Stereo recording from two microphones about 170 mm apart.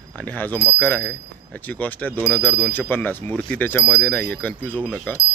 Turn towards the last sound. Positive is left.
turn(degrees=10)  # may be behind; listen again after turning